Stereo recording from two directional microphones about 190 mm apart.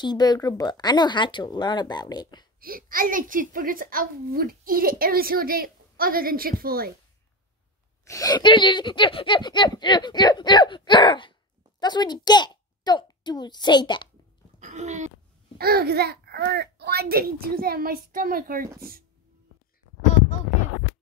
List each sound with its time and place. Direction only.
0.0 s speech: 20° left (ahead or behind)
2.6 s a child's voice: 50° right (ahead or behind)
8.0 s a child's voice: 15° left (ahead or behind)
14.6 s a sound: 40° right (ahead or behind)
15.6 s a child's voice: 55° right (ahead or behind)